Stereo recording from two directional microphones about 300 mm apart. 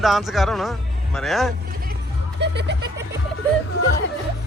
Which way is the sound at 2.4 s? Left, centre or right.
Right.